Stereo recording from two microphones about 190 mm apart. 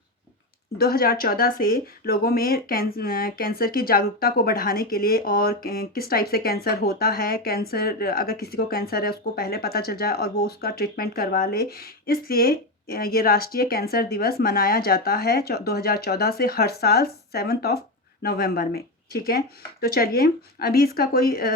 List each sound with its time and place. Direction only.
0.8 s speech: 55° left (ahead or behind)